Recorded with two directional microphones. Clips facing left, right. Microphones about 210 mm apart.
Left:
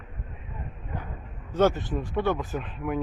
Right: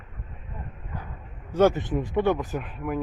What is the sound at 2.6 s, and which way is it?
Speech, 5° right (ahead or behind).